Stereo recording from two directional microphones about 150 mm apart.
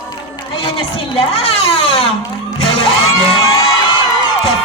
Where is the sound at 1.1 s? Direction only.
40° left (ahead or behind).